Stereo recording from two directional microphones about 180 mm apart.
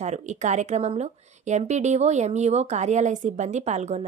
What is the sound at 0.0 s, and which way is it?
Speech, 40° right (ahead or behind).